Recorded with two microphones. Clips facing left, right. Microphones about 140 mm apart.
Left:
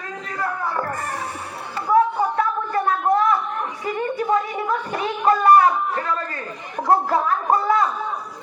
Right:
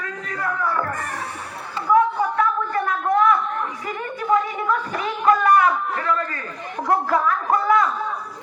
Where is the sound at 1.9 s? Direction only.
30° left (ahead or behind).